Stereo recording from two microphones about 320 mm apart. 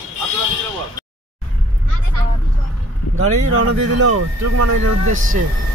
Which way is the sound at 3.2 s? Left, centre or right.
Right.